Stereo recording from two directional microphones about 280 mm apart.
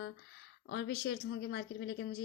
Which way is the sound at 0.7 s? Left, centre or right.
Left.